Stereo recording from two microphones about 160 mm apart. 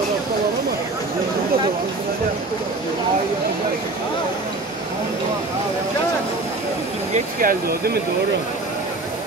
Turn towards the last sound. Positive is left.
turn(degrees=-65)  # may be behind; listen again after turning